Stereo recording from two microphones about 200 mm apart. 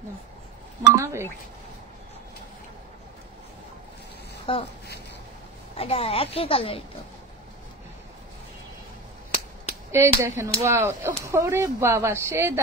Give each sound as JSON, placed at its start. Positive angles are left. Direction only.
{"t": 0.9, "sound": "speech", "side_deg": -15}
{"t": 4.5, "sound": "a woman's voice", "side_deg": 25}
{"t": 5.8, "sound": "a woman's voice", "side_deg": 30}
{"t": 9.9, "sound": "speech", "side_deg": -15}